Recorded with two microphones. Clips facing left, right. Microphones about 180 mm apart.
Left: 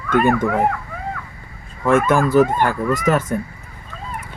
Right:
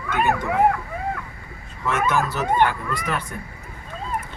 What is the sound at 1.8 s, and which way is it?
Speech, 50° left (ahead or behind).